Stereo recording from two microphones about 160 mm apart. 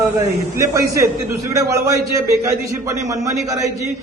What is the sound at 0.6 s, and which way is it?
A man's voice, 20° right (ahead or behind).